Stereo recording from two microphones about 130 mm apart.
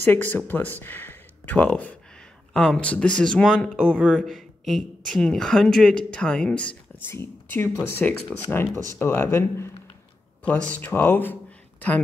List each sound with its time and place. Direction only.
0.0 s speech: 15° left (ahead or behind)
3.9 s a man's voice: 10° right (ahead or behind); by 11.3 s 15° left (ahead or behind)